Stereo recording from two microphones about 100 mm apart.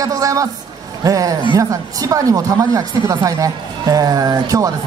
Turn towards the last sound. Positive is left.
turn(degrees=-40)  # may be behind; listen again after turning